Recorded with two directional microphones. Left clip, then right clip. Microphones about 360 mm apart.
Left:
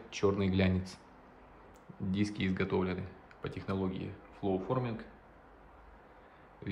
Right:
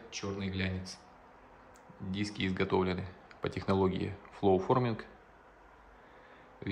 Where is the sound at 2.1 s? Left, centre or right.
Centre.